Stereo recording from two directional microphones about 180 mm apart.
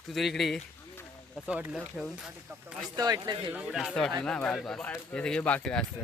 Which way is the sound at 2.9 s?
20° right (ahead or behind).